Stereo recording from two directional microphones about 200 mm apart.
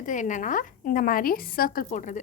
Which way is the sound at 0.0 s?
40° left (ahead or behind).